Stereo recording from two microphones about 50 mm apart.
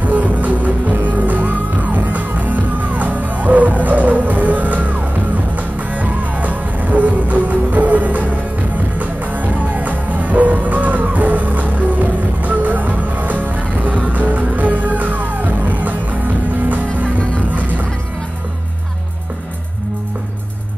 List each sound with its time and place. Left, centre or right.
0.0 s music: right
17.5 s music: right